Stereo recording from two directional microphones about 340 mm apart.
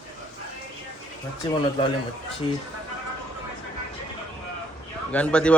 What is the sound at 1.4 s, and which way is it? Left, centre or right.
Speech, centre.